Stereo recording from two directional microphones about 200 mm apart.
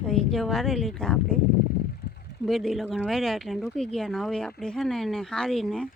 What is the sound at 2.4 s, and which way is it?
Speech, centre (ahead or behind).